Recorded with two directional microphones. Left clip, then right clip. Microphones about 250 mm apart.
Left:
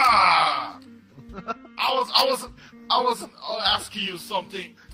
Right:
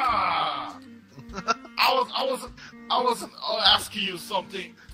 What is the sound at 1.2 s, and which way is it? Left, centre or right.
Music, right.